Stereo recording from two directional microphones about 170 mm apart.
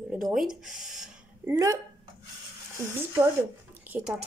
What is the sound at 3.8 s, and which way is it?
Speech, 10° right (ahead or behind).